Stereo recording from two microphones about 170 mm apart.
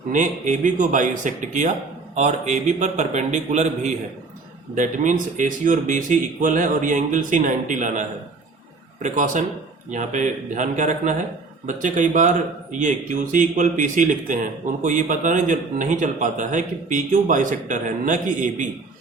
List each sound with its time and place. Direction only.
0.1 s a man's voice: 50° right (ahead or behind)